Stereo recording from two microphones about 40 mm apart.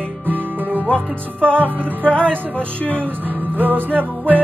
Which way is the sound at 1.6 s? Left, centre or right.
Right.